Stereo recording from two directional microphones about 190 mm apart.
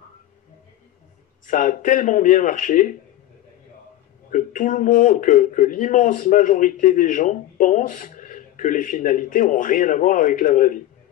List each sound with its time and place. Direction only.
1.4 s speech: 45° left (ahead or behind)
4.3 s speech: 40° left (ahead or behind)